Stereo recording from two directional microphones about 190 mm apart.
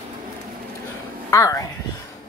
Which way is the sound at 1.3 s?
15° left (ahead or behind).